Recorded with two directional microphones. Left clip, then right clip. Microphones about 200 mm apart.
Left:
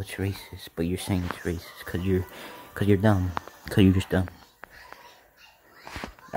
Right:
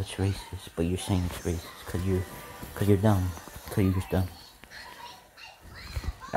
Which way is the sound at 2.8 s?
30° left (ahead or behind).